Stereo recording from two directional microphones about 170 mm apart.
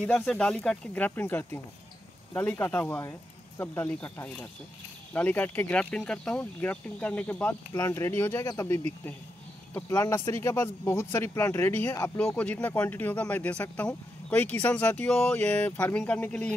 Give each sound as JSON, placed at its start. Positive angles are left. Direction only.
{"t": 0.0, "sound": "speech", "side_deg": 5}